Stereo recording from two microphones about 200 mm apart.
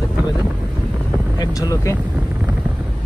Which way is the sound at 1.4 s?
15° left (ahead or behind).